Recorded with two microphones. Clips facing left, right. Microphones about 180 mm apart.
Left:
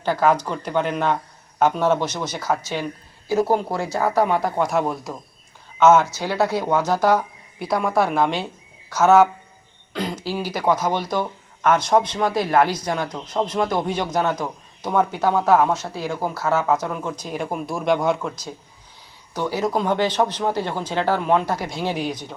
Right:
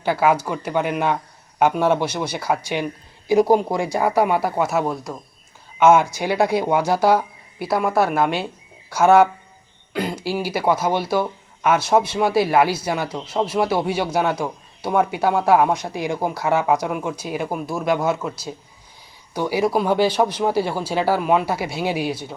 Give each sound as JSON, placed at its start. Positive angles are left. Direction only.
{"t": 0.0, "sound": "speech", "side_deg": -10}
{"t": 5.8, "sound": "speech", "side_deg": -10}